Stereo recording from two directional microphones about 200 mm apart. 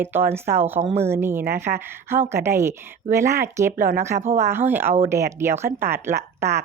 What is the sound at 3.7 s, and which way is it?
Speech, 45° right (ahead or behind).